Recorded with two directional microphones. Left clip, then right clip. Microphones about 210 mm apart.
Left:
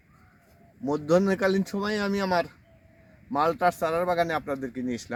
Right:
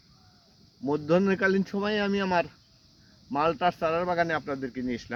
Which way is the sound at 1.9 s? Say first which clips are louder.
Right 1 dB; 20° right (ahead or behind).